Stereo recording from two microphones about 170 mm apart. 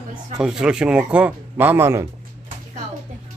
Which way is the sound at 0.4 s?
5° right (ahead or behind).